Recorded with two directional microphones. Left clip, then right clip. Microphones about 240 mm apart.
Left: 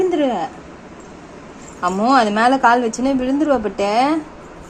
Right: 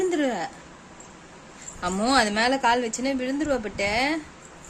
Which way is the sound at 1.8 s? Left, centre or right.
Right.